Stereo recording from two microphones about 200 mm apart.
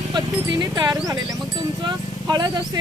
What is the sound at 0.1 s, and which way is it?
Speech, 20° right (ahead or behind).